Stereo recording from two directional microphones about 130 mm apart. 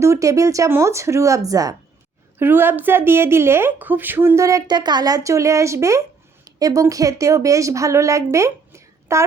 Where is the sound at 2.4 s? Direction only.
15° right (ahead or behind).